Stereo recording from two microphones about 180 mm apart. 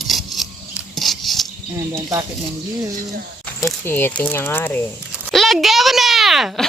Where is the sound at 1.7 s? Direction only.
20° right (ahead or behind).